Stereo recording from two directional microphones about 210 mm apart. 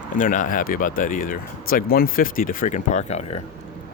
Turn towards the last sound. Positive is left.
turn(degrees=35)  # may be behind; listen again after turning